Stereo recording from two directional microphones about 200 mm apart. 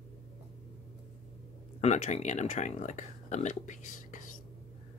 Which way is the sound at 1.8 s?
35° left (ahead or behind).